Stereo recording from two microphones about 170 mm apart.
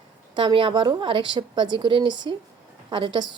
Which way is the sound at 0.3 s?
30° right (ahead or behind).